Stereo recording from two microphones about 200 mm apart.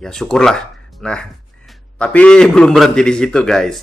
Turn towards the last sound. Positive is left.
turn(degrees=0)  # may be behind; listen again after turning